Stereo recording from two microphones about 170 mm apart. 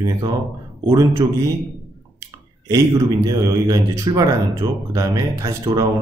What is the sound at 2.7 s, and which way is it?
Speech, 25° right (ahead or behind).